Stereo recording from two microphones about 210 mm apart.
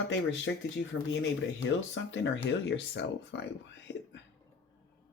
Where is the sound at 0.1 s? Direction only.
60° left (ahead or behind).